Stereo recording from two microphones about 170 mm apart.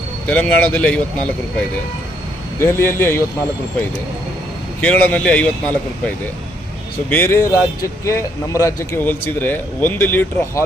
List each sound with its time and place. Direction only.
0.3 s speech: 10° left (ahead or behind)
2.6 s speech: 15° left (ahead or behind)
4.8 s speech: 10° left (ahead or behind)